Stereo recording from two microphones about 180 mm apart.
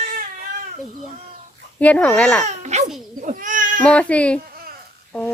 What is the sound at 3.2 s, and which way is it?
Cat, 45° right (ahead or behind).